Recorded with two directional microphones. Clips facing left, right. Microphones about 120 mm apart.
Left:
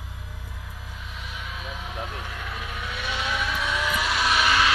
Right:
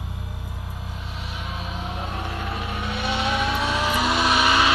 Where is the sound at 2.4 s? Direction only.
25° right (ahead or behind).